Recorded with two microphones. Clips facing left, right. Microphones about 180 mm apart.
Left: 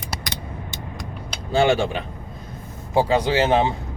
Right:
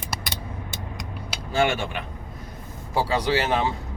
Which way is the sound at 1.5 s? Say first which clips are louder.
Left 5 dB; 30° left (ahead or behind).